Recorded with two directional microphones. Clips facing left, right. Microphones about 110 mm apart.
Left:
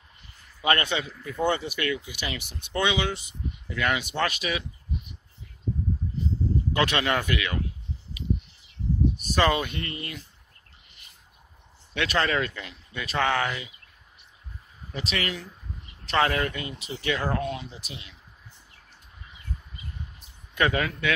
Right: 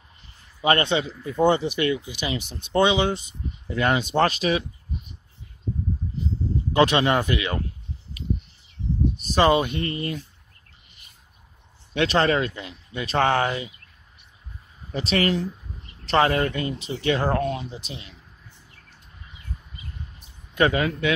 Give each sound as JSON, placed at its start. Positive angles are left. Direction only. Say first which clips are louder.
{"t": 0.6, "sound": "speech", "louder": "right 4 dB", "side_deg": -25}
{"t": 6.7, "sound": "speech", "louder": "right 7 dB", "side_deg": -25}
{"t": 9.2, "sound": "speech", "louder": "right 7 dB", "side_deg": -25}
{"t": 11.9, "sound": "speech", "louder": "right 5 dB", "side_deg": -30}
{"t": 14.9, "sound": "speech", "louder": "right 8 dB", "side_deg": -35}
{"t": 17.6, "sound": "speech", "louder": "right 5 dB", "side_deg": -25}
{"t": 20.5, "sound": "speech", "louder": "right 4 dB", "side_deg": -25}